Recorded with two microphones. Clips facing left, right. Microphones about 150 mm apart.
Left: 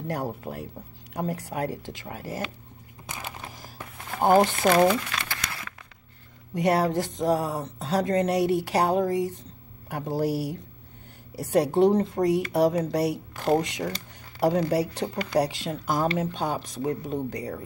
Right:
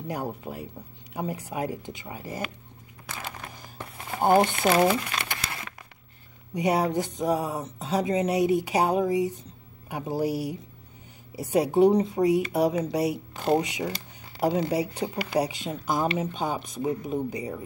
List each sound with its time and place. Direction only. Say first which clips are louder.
0.0 s speech: left 1 dB; centre (ahead or behind)
3.1 s a sound: even; 20° left (ahead or behind)
4.0 s crumpling: left 1 dB; centre (ahead or behind); by 5.8 s 20° right (ahead or behind)
6.5 s speech: left 1 dB; centre (ahead or behind)
13.9 s a sound: left 1 dB; centre (ahead or behind)
14.7 s speech: left 2 dB; centre (ahead or behind)
15.0 s speech: left 1 dB; 10° right (ahead or behind)
15.3 s speech: left 3 dB; centre (ahead or behind)